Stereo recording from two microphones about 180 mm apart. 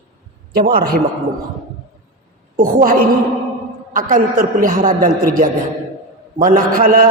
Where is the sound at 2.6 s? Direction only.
50° right (ahead or behind).